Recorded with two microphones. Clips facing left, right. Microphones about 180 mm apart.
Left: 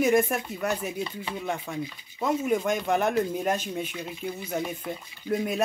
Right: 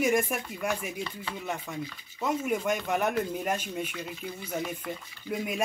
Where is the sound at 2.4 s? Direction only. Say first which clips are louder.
Left 4 dB; 10° right (ahead or behind).